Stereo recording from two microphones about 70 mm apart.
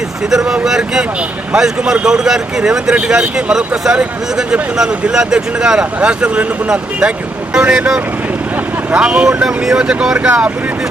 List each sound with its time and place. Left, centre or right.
0.3 s speech: centre